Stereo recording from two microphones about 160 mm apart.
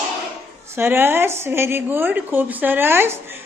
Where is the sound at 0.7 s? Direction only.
15° right (ahead or behind).